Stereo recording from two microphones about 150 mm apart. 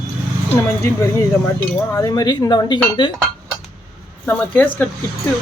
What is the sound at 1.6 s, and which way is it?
Speech, 20° left (ahead or behind).